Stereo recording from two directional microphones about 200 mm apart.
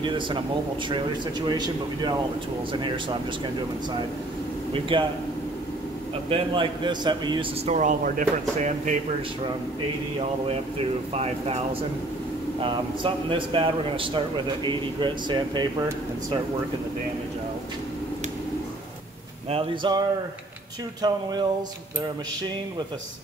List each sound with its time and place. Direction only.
0.0 s a man's voice: 25° right (ahead or behind)
4.7 s a man's voice: 25° right (ahead or behind)
6.2 s a man's voice: 25° right (ahead or behind)
11.1 s a man's voice: 30° right (ahead or behind)
19.5 s a man's voice: 25° right (ahead or behind)
21.0 s a man's voice: 20° right (ahead or behind)